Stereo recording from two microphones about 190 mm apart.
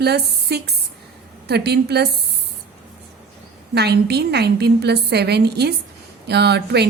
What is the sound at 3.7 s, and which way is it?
A woman's voice, 60° right (ahead or behind).